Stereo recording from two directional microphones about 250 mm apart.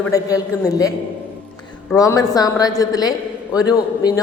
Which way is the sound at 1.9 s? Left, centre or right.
Centre.